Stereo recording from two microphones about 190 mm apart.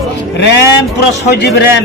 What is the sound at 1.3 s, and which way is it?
Speech, 60° left (ahead or behind).